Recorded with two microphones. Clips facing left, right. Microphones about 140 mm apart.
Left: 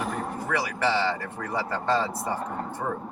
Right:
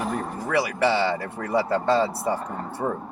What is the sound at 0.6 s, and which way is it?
Speech, 10° right (ahead or behind).